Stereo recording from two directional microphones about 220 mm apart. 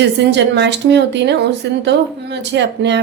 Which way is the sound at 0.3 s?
50° right (ahead or behind).